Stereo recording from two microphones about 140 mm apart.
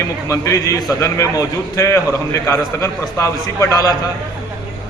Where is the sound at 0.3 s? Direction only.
20° left (ahead or behind).